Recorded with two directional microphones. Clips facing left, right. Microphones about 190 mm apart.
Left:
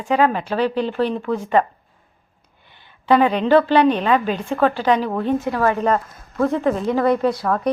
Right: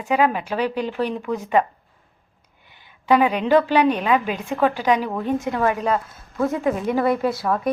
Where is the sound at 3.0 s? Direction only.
10° right (ahead or behind).